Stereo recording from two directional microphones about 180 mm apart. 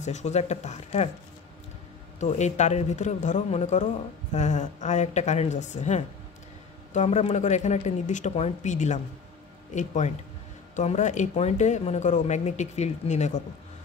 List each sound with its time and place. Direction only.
0.0 s a man's voice: 40° left (ahead or behind)
2.1 s a man's voice: 40° left (ahead or behind)